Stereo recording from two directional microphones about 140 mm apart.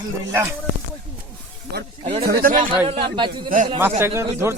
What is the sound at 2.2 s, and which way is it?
Speech, 90° right.